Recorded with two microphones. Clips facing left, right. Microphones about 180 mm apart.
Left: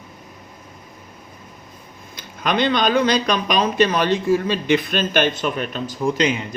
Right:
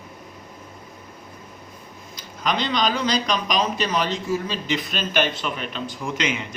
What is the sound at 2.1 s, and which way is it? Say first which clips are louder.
Speech: left 4 dB; 60° left (ahead or behind).